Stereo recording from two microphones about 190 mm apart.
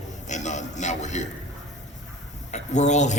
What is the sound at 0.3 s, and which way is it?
A man's voice, 40° left (ahead or behind).